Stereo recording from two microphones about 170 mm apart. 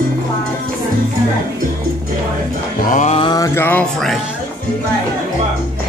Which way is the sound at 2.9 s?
45° left (ahead or behind).